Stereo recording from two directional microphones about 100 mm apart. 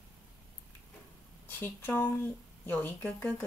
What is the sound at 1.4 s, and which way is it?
Speech, 20° left (ahead or behind).